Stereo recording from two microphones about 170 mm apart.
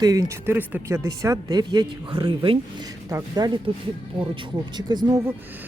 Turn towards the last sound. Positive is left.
turn(degrees=-25)  # may be behind; listen again after turning